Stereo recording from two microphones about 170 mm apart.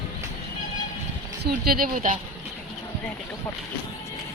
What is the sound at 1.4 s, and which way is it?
Speech, 65° right (ahead or behind).